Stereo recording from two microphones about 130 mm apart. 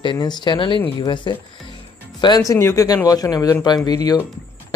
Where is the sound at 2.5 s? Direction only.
20° left (ahead or behind).